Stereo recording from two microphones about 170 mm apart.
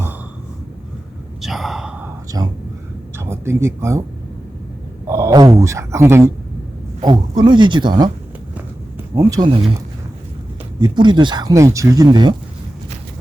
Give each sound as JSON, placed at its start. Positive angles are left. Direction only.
{"t": 1.4, "sound": "sigh", "side_deg": 0}
{"t": 2.3, "sound": "speech", "side_deg": -20}
{"t": 5.0, "sound": "a sound", "side_deg": -15}
{"t": 5.5, "sound": "speech", "side_deg": -15}
{"t": 9.1, "sound": "speech", "side_deg": -20}
{"t": 10.8, "sound": "speech", "side_deg": -25}